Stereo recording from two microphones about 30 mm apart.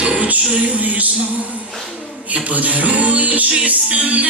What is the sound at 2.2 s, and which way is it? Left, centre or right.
Music, right.